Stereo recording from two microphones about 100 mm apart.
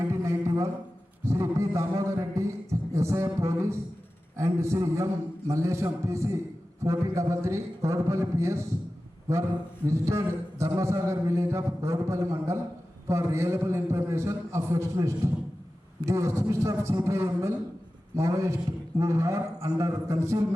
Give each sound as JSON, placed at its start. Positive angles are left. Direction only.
{"t": 0.1, "sound": "a sound", "side_deg": -30}
{"t": 3.4, "sound": "a man's voice", "side_deg": -30}
{"t": 9.8, "sound": "a man's voice", "side_deg": -30}